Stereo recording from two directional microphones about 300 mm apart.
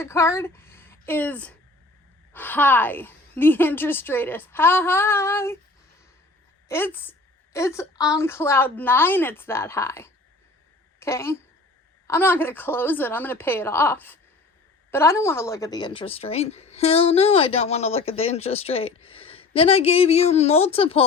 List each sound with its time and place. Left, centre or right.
0.0 s a woman's voice: centre
6.7 s a woman's voice: centre